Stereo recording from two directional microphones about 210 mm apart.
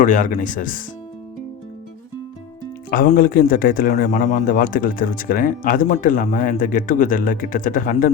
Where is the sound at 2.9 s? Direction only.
45° left (ahead or behind).